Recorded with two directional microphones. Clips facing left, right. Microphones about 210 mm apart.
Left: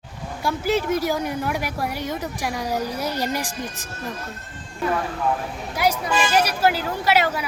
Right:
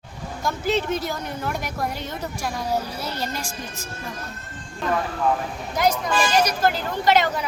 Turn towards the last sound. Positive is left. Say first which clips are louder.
# right 1 dB
turn(degrees=10)  # may be behind; listen again after turning